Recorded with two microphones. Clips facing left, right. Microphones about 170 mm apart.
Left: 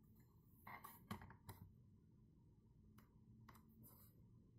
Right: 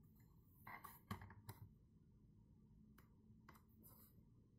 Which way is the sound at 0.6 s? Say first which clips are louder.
Even; centre (ahead or behind).